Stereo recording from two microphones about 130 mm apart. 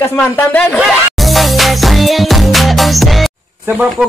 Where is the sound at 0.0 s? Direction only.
15° left (ahead or behind).